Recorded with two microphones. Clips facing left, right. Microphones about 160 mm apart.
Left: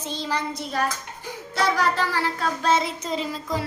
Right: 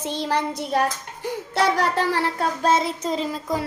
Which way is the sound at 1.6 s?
60° right (ahead or behind).